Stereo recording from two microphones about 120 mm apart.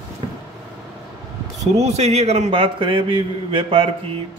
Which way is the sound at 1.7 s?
65° right (ahead or behind).